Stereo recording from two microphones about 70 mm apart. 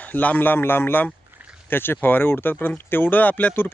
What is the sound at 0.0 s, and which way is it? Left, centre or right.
Speech, left.